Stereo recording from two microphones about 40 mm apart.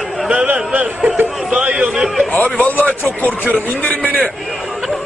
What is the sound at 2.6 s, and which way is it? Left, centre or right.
A man's voice, left.